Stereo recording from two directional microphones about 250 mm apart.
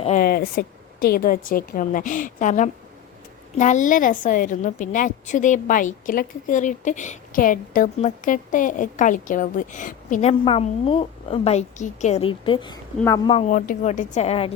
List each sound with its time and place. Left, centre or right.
0.0 s a woman's voice: left; by 13.4 s centre
13.5 s a woman's voice: left